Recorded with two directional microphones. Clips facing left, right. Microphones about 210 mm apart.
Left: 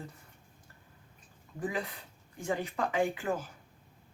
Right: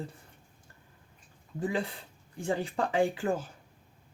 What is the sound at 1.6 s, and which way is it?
Speech, 30° right (ahead or behind).